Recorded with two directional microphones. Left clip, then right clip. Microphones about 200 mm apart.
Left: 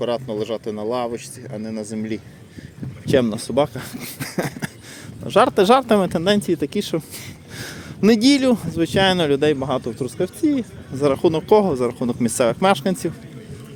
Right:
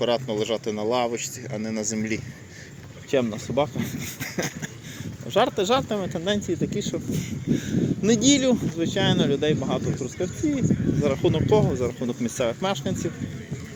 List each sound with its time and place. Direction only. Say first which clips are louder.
0.0 s speech: left 1 dB; 15° left (ahead or behind)
3.1 s speech: left 6 dB; 50° left (ahead or behind)
7.2 s speech: right 6 dB; 40° left (ahead or behind); by 10.6 s 55° left (ahead or behind)
11.0 s speech: left 7 dB; 40° left (ahead or behind)